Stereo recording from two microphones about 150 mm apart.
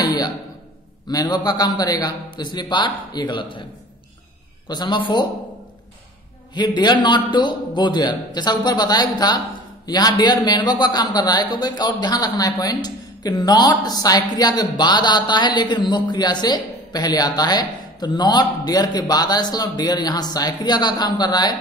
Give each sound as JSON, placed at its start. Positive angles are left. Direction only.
{"t": 0.0, "sound": "a sound", "side_deg": 25}
{"t": 1.0, "sound": "a man's voice", "side_deg": 25}
{"t": 4.6, "sound": "a man's voice", "side_deg": 30}
{"t": 6.5, "sound": "a man's voice", "side_deg": 30}